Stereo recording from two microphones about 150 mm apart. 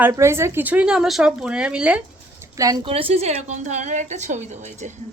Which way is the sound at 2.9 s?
40° right (ahead or behind).